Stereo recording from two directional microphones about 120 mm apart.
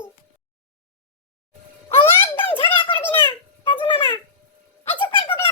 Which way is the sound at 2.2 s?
50° left (ahead or behind).